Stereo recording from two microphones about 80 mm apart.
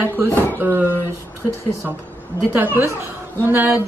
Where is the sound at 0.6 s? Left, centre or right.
Right.